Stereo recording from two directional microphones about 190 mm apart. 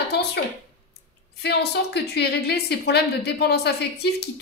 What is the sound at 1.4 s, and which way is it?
A woman's voice, 60° left (ahead or behind).